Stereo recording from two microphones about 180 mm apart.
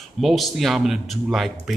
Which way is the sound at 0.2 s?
Centre (ahead or behind).